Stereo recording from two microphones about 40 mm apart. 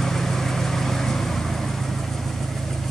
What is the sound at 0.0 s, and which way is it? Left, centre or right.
Vehicle, centre.